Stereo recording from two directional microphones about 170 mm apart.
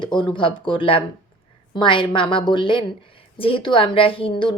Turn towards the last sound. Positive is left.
turn(degrees=30)  # may be behind; listen again after turning